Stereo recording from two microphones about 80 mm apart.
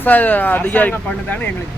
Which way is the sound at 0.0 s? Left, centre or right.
Left.